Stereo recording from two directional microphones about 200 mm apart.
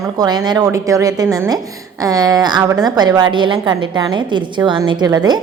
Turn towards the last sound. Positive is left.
turn(degrees=-20)  # may be behind; listen again after turning